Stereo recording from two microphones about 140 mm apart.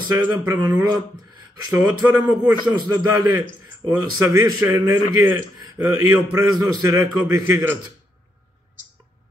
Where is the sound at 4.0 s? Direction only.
25° right (ahead or behind).